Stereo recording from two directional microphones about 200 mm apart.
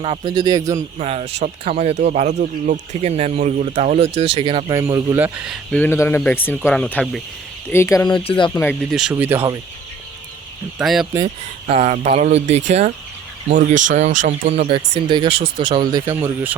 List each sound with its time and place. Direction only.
0.0 s speech: 25° right (ahead or behind)
0.9 s speech: 30° right (ahead or behind); by 5.8 s 5° right (ahead or behind)
5.8 s speech: 10° left (ahead or behind)
8.9 s speech: centre (ahead or behind)
10.8 s speech: centre (ahead or behind)
11.7 s speech: 30° right (ahead or behind); by 16.6 s 10° right (ahead or behind)